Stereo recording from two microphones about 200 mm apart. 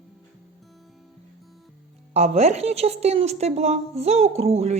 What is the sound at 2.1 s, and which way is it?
A woman's voice, 35° right (ahead or behind).